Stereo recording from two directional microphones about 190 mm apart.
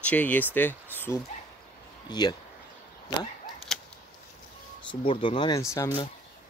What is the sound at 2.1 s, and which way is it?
Speech, 20° left (ahead or behind).